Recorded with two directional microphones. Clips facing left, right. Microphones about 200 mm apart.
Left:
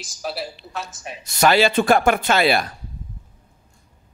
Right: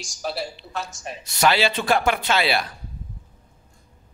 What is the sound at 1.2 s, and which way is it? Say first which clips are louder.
A man's voice: left 4 dB; 45° left (ahead or behind).